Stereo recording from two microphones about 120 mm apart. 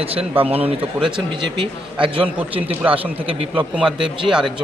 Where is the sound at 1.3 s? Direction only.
45° right (ahead or behind).